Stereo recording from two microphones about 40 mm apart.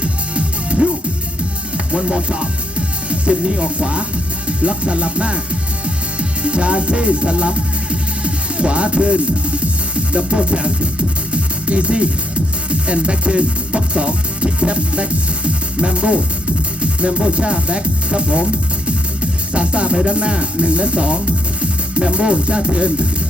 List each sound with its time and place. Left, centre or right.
0.0 s music: right
1.9 s music: right
3.1 s speech: right
4.4 s music: right
16.8 s speech: right
18.9 s music: right
21.6 s speech: right